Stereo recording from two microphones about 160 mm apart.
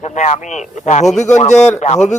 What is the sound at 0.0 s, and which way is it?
Speech, 45° left (ahead or behind).